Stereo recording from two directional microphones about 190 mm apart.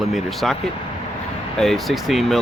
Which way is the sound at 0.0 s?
Centre (ahead or behind).